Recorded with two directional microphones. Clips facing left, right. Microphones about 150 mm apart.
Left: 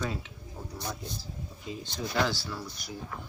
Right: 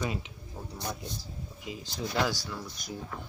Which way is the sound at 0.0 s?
15° right (ahead or behind).